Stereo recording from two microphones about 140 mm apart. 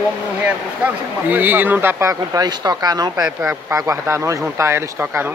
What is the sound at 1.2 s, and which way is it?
Speech, 15° right (ahead or behind).